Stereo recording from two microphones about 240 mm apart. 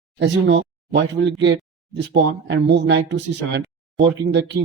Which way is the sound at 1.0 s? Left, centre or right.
Right.